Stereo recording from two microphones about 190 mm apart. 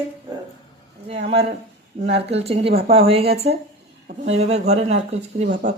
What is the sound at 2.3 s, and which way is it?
Speech, 30° right (ahead or behind).